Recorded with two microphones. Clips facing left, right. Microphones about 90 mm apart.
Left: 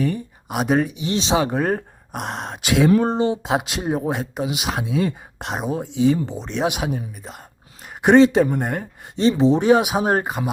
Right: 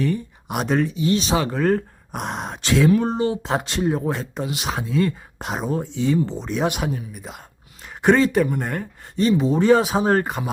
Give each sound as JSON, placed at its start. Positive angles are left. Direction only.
{"t": 0.4, "sound": "speech", "side_deg": 5}
{"t": 2.1, "sound": "speech", "side_deg": 0}
{"t": 2.6, "sound": "speech", "side_deg": 15}
{"t": 3.2, "sound": "speech", "side_deg": 25}
{"t": 3.4, "sound": "speech", "side_deg": 10}
{"t": 5.4, "sound": "speech", "side_deg": 0}
{"t": 6.4, "sound": "speech", "side_deg": 0}
{"t": 8.0, "sound": "speech", "side_deg": 20}
{"t": 9.6, "sound": "speech", "side_deg": 10}